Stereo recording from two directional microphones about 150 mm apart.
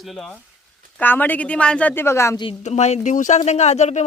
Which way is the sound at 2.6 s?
50° left (ahead or behind).